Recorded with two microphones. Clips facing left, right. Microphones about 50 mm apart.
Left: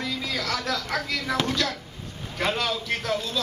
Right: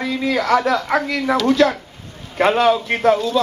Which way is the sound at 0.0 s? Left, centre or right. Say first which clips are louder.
Right 10 dB; right.